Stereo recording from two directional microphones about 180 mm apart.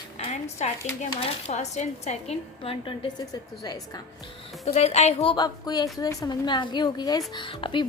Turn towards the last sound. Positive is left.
turn(degrees=30)  # may be behind; listen again after turning